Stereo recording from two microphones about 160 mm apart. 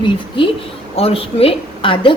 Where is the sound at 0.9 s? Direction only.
35° left (ahead or behind).